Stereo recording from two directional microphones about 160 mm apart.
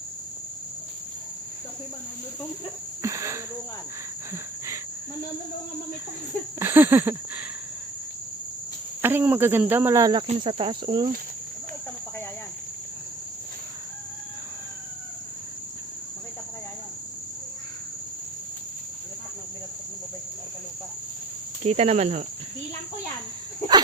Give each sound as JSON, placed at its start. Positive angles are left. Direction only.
{"t": 3.0, "sound": "speech", "side_deg": -20}
{"t": 6.6, "sound": "speech", "side_deg": -15}
{"t": 9.0, "sound": "speech", "side_deg": -10}
{"t": 10.2, "sound": "cricket", "side_deg": -35}
{"t": 21.6, "sound": "cricket", "side_deg": -40}